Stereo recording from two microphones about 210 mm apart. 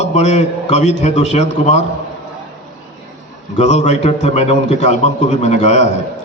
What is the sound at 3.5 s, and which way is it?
A man's voice, 35° left (ahead or behind).